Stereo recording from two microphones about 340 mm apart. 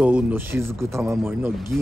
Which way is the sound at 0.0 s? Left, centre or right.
Centre.